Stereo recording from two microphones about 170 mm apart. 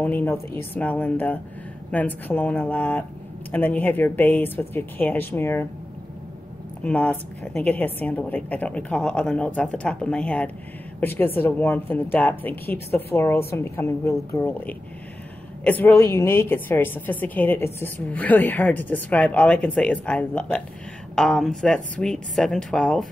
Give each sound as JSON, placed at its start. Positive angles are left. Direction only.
{"t": 0.0, "sound": "a woman's voice", "side_deg": 10}
{"t": 6.8, "sound": "a woman's voice", "side_deg": 5}